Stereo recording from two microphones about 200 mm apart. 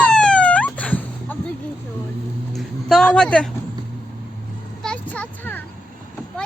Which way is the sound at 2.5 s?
Centre (ahead or behind).